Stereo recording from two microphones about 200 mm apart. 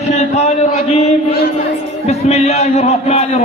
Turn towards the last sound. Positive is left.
turn(degrees=30)  # may be behind; listen again after turning